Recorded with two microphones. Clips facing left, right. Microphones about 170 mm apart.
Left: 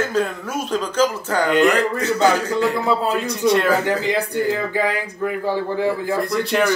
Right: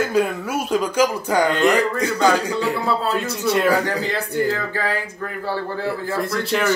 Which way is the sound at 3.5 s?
5° right (ahead or behind).